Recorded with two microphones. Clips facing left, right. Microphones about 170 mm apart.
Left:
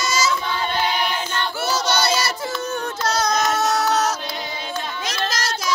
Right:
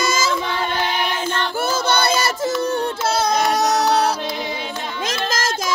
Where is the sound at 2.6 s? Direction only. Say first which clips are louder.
Right 5 dB; 35° right (ahead or behind).